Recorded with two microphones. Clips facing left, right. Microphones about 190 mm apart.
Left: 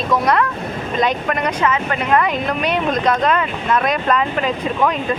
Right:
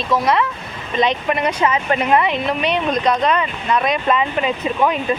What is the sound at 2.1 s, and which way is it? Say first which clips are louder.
Speech: even; 5° right (ahead or behind).